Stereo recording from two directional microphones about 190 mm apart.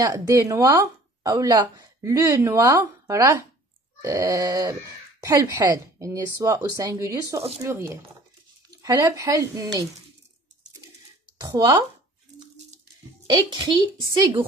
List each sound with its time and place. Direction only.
0.0 s speech: 15° right (ahead or behind)
13.5 s a woman's voice: 25° right (ahead or behind)